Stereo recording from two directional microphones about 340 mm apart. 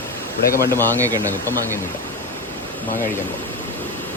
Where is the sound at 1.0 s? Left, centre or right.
Centre.